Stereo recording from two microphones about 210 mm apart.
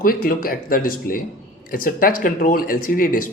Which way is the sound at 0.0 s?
45° left (ahead or behind).